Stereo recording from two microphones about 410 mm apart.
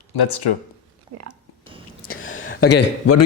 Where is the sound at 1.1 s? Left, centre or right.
Right.